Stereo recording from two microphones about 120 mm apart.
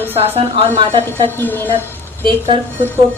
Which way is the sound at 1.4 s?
15° left (ahead or behind).